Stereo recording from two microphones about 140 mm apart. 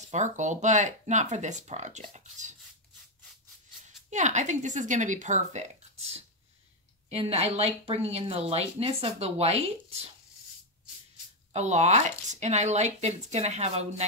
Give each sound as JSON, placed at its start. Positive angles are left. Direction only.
{"t": 0.1, "sound": "speech", "side_deg": -60}
{"t": 3.8, "sound": "speech", "side_deg": -60}
{"t": 11.5, "sound": "speech", "side_deg": -55}